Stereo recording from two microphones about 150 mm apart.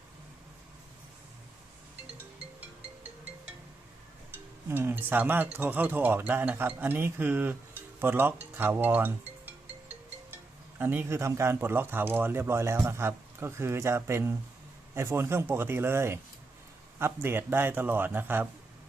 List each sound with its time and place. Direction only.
4.7 s speech: 15° right (ahead or behind)